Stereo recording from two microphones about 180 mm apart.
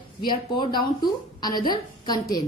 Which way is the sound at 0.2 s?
25° left (ahead or behind).